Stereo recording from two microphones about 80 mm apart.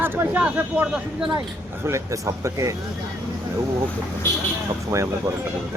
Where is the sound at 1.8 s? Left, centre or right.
Right.